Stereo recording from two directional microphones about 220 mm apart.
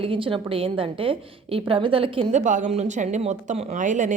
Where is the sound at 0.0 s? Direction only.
25° right (ahead or behind).